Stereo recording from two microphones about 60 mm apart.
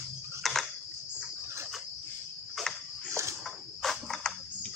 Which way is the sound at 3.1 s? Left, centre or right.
Right.